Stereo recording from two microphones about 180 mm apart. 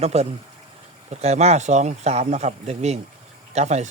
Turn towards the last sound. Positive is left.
turn(degrees=-40)  # may be behind; listen again after turning